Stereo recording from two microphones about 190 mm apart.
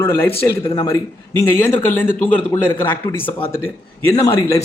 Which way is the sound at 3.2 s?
25° left (ahead or behind).